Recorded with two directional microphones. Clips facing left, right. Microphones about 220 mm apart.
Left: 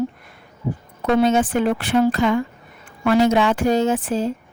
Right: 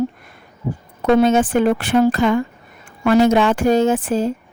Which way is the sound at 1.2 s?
50° right (ahead or behind).